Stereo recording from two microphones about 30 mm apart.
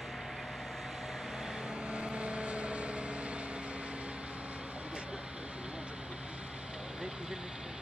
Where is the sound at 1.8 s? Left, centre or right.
Right.